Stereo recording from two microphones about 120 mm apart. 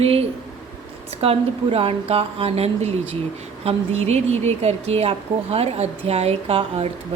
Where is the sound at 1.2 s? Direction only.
50° right (ahead or behind).